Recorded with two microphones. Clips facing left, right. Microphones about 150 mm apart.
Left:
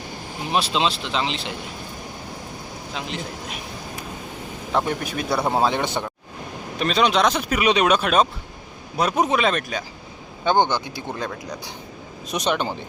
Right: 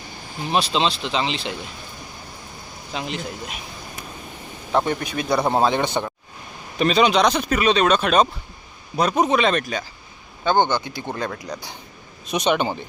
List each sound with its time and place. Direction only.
0.5 s speech: 5° left (ahead or behind)
2.9 s speech: centre (ahead or behind)
4.7 s speech: centre (ahead or behind)
10.4 s speech: 15° left (ahead or behind); by 12.7 s 5° right (ahead or behind)